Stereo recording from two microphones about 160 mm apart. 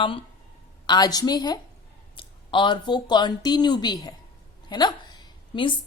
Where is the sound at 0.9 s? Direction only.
25° left (ahead or behind).